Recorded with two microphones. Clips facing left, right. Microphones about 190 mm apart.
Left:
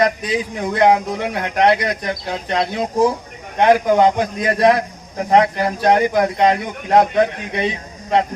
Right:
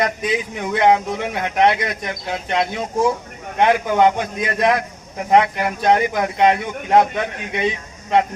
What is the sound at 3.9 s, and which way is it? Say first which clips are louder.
A man's voice: left 2 dB; 35° left (ahead or behind).